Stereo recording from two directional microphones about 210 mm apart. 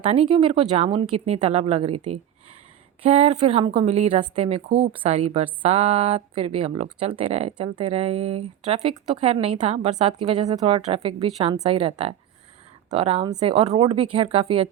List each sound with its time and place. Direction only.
0.0 s speech: 25° right (ahead or behind)